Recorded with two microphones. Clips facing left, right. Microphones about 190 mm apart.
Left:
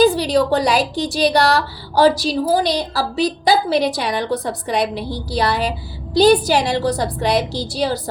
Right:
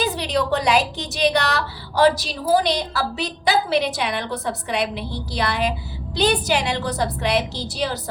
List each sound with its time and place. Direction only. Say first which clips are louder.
0.0 s a woman's voice: left 8 dB; 30° left (ahead or behind)